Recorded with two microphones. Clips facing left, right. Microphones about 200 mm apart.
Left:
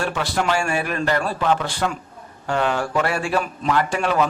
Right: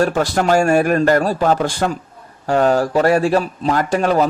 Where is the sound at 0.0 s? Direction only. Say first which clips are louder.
Right 7 dB; 45° right (ahead or behind).